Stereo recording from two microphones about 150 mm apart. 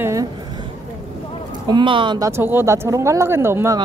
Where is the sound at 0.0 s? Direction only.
20° right (ahead or behind).